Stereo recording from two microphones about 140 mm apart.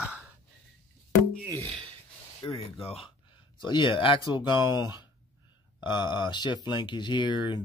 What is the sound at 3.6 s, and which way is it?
Speech, 35° left (ahead or behind).